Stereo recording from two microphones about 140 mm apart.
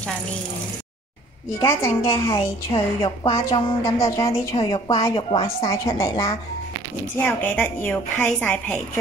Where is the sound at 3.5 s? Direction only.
25° left (ahead or behind).